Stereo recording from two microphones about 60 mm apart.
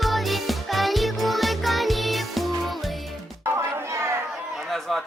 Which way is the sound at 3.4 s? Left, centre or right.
Right.